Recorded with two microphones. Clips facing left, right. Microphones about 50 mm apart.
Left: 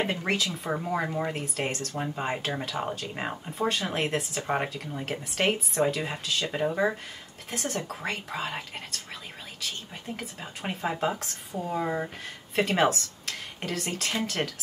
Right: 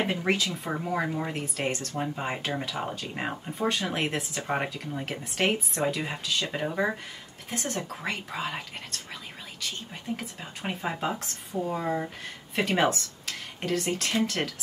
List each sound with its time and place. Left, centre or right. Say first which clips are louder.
0.0 s speech: right 1 dB; centre
10.1 s speech: right 1 dB; centre